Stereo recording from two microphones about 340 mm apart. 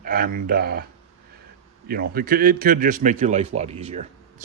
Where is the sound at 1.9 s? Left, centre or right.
Right.